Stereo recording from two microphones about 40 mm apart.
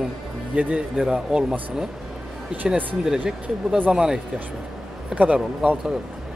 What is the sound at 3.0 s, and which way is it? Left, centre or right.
Speech, centre.